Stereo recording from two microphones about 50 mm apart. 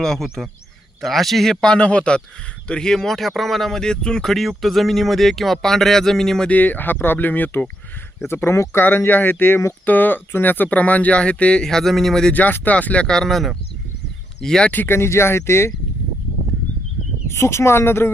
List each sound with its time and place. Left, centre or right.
0.0 s speech: centre
1.6 s speech: left; by 3.8 s centre
3.8 s speech: centre
6.5 s speech: left
8.3 s speech: left
8.8 s speech: left
11.6 s speech: centre
12.3 s speech: left
13.1 s speech: centre
14.4 s speech: centre
14.8 s speech: left
17.2 s speech: left